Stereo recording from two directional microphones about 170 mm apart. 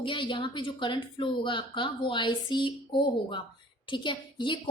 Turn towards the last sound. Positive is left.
turn(degrees=30)  # may be behind; listen again after turning